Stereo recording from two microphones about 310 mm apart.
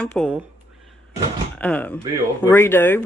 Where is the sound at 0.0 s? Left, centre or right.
Centre.